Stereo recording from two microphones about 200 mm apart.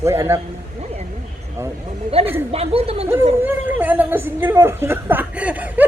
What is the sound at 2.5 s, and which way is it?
Speech, 30° right (ahead or behind).